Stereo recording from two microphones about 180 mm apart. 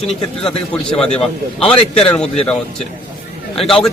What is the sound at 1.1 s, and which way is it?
Speech, 30° left (ahead or behind).